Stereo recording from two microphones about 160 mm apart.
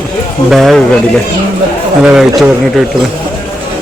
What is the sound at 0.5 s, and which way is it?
Speech, centre (ahead or behind).